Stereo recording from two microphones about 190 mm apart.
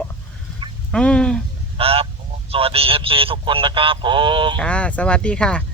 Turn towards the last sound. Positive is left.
turn(degrees=5)  # may be behind; listen again after turning